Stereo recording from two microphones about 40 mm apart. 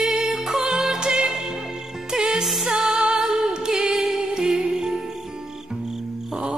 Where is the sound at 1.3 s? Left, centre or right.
Centre.